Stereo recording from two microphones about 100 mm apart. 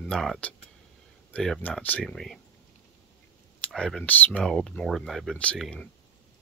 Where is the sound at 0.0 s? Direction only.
5° left (ahead or behind).